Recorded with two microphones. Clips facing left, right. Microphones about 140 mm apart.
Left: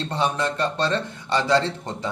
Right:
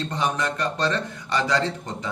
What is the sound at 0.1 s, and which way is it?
A man's voice, 30° left (ahead or behind).